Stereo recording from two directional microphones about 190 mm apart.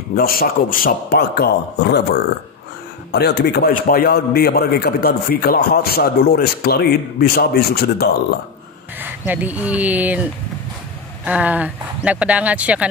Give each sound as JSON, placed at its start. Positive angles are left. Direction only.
{"t": 0.1, "sound": "a man's voice", "side_deg": 50}
{"t": 3.1, "sound": "a man's voice", "side_deg": 60}
{"t": 8.9, "sound": "speech", "side_deg": -10}
{"t": 11.2, "sound": "speech", "side_deg": -5}